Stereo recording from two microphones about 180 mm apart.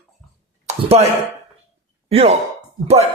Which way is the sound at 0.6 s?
35° right (ahead or behind).